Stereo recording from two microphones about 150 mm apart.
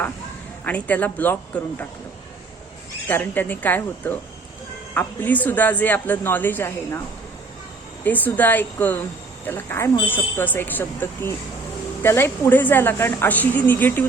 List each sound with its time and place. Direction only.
0.6 s a woman's voice: 10° left (ahead or behind)
3.1 s a woman's voice: 10° left (ahead or behind)
8.0 s a woman's voice: 10° left (ahead or behind)